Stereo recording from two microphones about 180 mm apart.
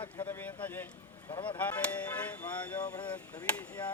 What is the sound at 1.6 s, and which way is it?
Speech, 10° left (ahead or behind).